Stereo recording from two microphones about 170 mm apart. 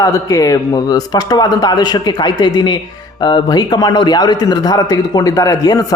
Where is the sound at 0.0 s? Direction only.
20° left (ahead or behind).